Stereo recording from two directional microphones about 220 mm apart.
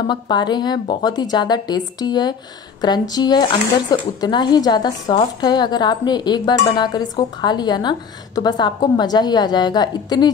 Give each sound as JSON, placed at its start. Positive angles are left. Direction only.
{"t": 0.1, "sound": "a woman's voice", "side_deg": 20}